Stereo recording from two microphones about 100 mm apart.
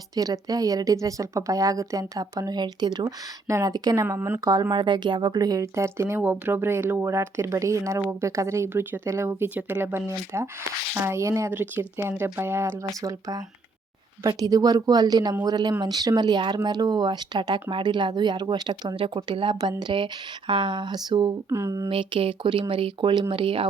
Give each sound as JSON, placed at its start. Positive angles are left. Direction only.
{"t": 0.2, "sound": "speech", "side_deg": -40}
{"t": 3.4, "sound": "speech", "side_deg": -35}
{"t": 4.0, "sound": "speech", "side_deg": -25}
{"t": 4.4, "sound": "speech", "side_deg": -40}
{"t": 18.9, "sound": "speech", "side_deg": -60}
{"t": 21.5, "sound": "speech", "side_deg": -30}
{"t": 21.8, "sound": "speech", "side_deg": -60}